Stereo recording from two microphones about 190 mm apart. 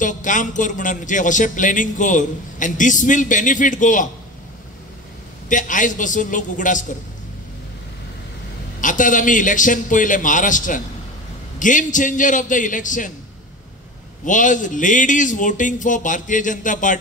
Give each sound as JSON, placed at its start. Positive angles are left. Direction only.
{"t": 0.0, "sound": "a man's voice", "side_deg": 40}
{"t": 5.5, "sound": "a man's voice", "side_deg": 40}
{"t": 8.8, "sound": "a man's voice", "side_deg": 45}
{"t": 14.2, "sound": "a man's voice", "side_deg": 40}